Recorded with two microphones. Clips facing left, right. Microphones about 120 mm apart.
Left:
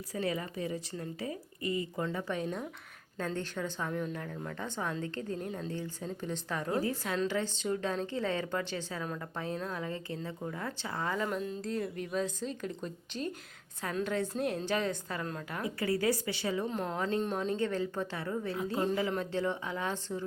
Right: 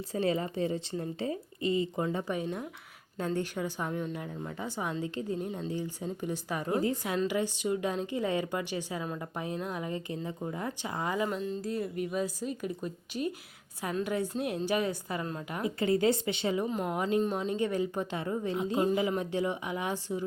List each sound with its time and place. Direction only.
0.1 s speech: 25° right (ahead or behind)
11.3 s speech: centre (ahead or behind); by 16.6 s 20° right (ahead or behind)
16.6 s speech: 10° right (ahead or behind)